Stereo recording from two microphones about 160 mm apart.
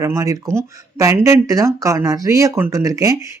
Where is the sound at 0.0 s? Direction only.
20° right (ahead or behind).